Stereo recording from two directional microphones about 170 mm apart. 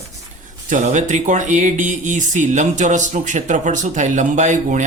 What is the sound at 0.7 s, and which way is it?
A man's voice, 45° right (ahead or behind).